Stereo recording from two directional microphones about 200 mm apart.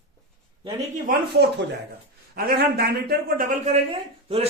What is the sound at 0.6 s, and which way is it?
Speech, 40° right (ahead or behind).